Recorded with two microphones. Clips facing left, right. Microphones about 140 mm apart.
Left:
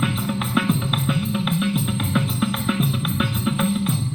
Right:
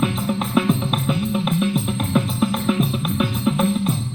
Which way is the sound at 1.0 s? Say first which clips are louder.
Right 2 dB; 35° right (ahead or behind).